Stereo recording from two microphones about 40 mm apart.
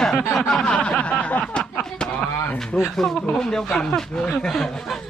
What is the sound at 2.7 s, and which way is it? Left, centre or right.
Speech, left.